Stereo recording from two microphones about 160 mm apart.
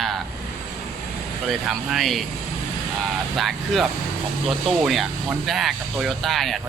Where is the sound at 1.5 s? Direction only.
Centre (ahead or behind).